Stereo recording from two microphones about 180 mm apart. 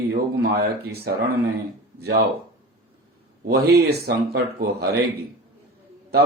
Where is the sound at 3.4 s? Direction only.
60° right (ahead or behind).